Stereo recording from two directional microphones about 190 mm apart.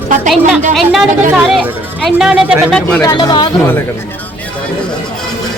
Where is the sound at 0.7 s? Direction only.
Centre (ahead or behind).